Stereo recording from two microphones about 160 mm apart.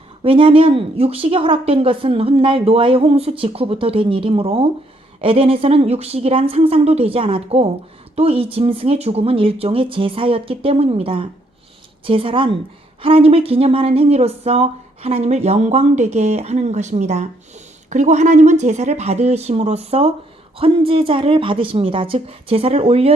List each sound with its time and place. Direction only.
0.2 s a woman's voice: 35° right (ahead or behind)